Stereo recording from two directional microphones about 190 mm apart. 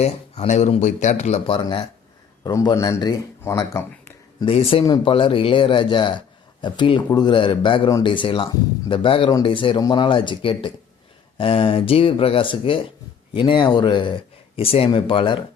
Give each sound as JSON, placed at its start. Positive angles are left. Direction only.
{"t": 0.0, "sound": "speech", "side_deg": 35}
{"t": 4.4, "sound": "speech", "side_deg": 30}